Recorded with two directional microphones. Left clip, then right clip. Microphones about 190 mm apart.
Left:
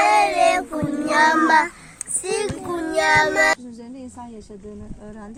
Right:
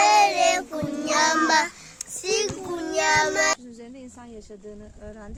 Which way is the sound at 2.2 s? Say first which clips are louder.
Even; 15° right (ahead or behind).